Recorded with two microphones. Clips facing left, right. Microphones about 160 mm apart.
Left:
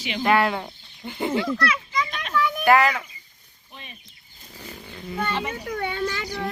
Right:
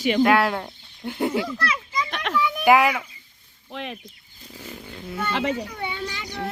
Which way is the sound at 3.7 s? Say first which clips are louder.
Right 12 dB; 90° right.